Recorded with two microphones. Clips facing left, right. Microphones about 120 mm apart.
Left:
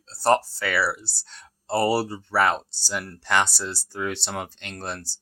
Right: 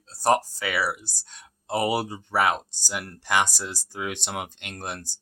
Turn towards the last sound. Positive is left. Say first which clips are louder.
# left 1 dB
turn(degrees=-15)  # may be behind; listen again after turning